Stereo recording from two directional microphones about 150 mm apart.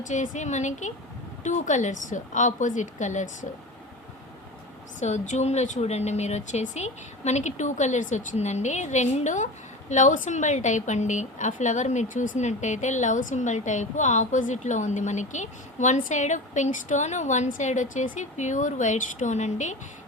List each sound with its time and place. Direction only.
0.0 s a woman's voice: 55° left (ahead or behind)
4.9 s a woman's voice: 55° left (ahead or behind)